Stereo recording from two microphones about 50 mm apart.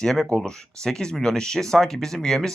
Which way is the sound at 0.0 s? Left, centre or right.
Centre.